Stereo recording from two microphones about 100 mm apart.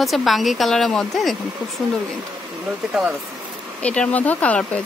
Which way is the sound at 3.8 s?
15° left (ahead or behind).